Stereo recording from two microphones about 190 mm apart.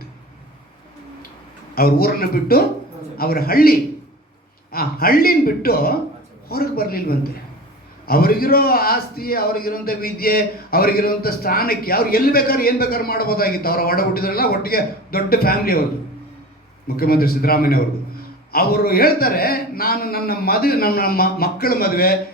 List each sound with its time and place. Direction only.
1.7 s a man's voice: 50° left (ahead or behind)
17.0 s a man's voice: 50° left (ahead or behind)